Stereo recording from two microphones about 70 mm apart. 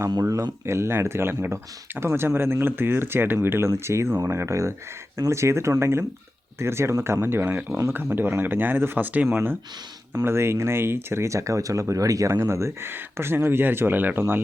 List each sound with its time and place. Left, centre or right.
0.6 s speech: right